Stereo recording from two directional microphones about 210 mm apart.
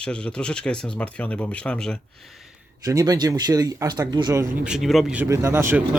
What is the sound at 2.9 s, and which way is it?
Speech, 15° right (ahead or behind).